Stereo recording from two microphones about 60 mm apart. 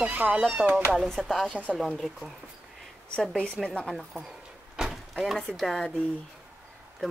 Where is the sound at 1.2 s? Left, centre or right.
Centre.